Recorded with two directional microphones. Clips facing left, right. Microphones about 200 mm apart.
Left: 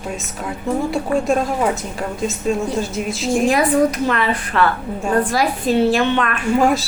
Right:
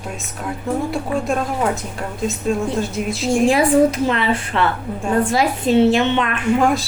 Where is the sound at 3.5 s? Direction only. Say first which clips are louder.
Right 2 dB; 25° right (ahead or behind).